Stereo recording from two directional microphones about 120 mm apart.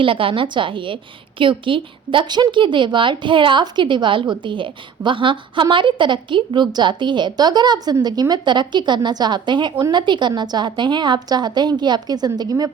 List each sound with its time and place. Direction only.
0.0 s a woman's voice: 45° right (ahead or behind)